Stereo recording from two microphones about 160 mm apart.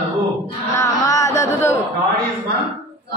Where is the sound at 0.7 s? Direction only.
20° left (ahead or behind).